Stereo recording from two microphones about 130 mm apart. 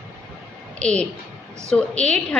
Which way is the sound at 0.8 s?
10° left (ahead or behind).